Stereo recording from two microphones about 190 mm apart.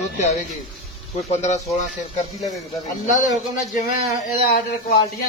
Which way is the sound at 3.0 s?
40° left (ahead or behind).